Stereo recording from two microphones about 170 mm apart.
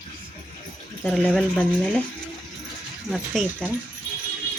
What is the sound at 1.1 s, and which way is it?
Speech, 5° left (ahead or behind).